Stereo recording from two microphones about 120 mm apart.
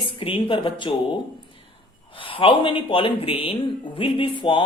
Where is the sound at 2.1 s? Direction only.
45° left (ahead or behind).